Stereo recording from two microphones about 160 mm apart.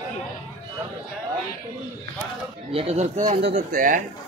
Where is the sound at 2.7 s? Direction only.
40° right (ahead or behind).